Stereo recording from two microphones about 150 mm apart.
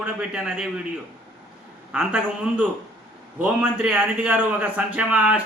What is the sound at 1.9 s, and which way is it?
A man's voice, 5° right (ahead or behind).